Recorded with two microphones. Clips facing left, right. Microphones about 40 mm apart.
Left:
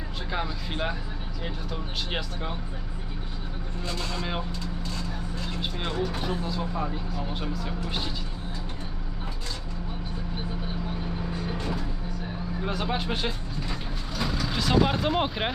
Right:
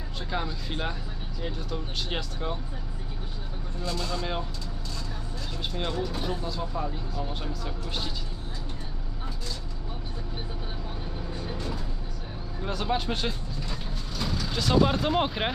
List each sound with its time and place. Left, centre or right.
0.3 s speech: centre
3.8 s speech: left
4.2 s speech: centre
5.5 s speech: centre
6.0 s speech: left
6.4 s speech: centre
11.5 s vehicle: left
12.6 s speech: centre